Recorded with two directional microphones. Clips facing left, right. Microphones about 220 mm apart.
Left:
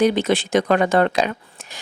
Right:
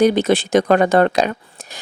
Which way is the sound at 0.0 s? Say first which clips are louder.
Right 3 dB; 40° right (ahead or behind).